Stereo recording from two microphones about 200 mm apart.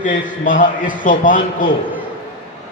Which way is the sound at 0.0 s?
40° left (ahead or behind).